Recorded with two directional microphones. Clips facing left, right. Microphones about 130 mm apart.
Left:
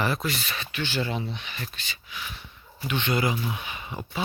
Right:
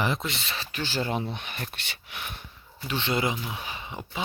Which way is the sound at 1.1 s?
50° right (ahead or behind).